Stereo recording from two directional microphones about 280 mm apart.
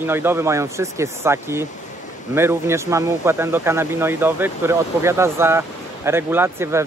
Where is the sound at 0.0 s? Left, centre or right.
Centre.